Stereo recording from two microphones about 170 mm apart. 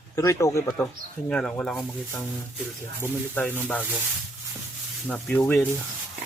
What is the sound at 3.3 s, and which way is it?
Speech, 10° left (ahead or behind).